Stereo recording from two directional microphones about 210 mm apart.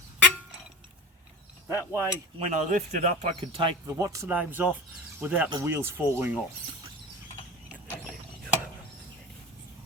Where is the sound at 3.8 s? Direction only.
15° right (ahead or behind).